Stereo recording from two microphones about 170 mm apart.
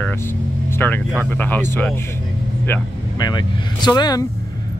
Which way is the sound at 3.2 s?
25° left (ahead or behind).